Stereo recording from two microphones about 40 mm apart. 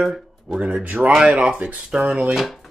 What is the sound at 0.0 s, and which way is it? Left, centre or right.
Speech, centre.